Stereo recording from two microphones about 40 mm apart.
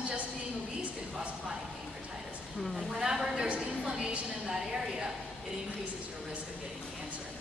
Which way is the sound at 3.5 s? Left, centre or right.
Right.